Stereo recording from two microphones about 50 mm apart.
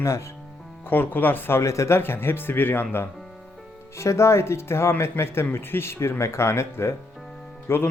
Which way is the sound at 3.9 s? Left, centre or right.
Left.